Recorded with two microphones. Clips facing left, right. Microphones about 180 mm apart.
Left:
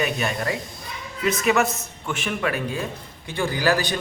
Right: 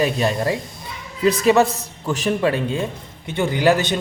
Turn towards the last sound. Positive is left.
turn(degrees=-25)  # may be behind; listen again after turning